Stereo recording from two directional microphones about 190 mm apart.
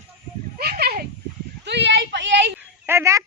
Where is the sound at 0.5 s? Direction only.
55° right (ahead or behind).